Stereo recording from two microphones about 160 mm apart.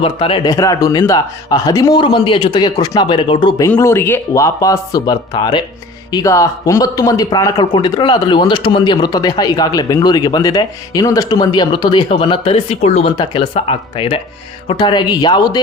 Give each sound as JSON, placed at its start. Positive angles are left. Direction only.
{"t": 0.0, "sound": "speech", "side_deg": 30}
{"t": 3.8, "sound": "speech", "side_deg": 15}
{"t": 13.1, "sound": "speech", "side_deg": 30}